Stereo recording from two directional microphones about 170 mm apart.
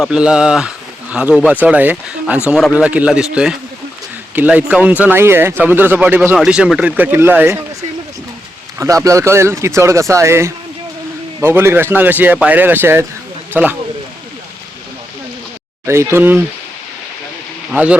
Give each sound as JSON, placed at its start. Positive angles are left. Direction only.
{"t": 0.0, "sound": "speech", "side_deg": -5}
{"t": 8.8, "sound": "speech", "side_deg": -20}
{"t": 15.9, "sound": "speech", "side_deg": -15}
{"t": 17.7, "sound": "speech", "side_deg": -5}